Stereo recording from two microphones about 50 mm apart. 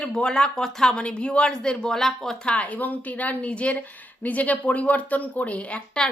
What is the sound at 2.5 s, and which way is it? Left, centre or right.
Speech, left.